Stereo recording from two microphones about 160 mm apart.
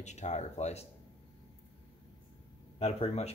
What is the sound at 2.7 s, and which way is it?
Speech, 40° left (ahead or behind).